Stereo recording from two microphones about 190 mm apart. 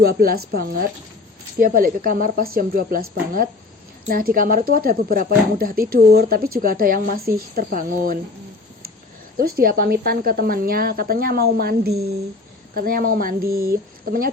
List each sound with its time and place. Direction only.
0.0 s speech: 50° right (ahead or behind)
9.4 s a woman's voice: 50° right (ahead or behind)